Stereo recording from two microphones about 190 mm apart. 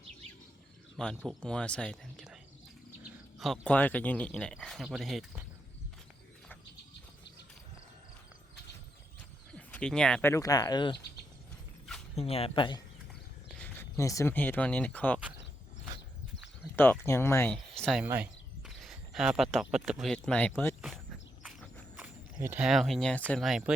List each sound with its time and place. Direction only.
1.0 s speech: 5° left (ahead or behind)
9.5 s speech: 5° left (ahead or behind); by 10.9 s 20° left (ahead or behind)
12.1 s speech: 30° left (ahead or behind)
13.5 s speech: 10° left (ahead or behind)
16.7 s speech: 10° left (ahead or behind)
18.0 s speech: 10° right (ahead or behind)
21.4 s walk: 5° right (ahead or behind)
23.3 s speech: centre (ahead or behind)